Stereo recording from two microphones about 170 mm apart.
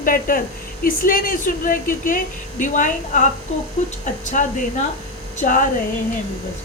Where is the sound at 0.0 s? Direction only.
55° left (ahead or behind).